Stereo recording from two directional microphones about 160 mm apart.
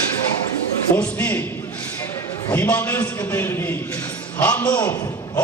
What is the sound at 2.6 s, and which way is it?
A man's voice, 10° left (ahead or behind).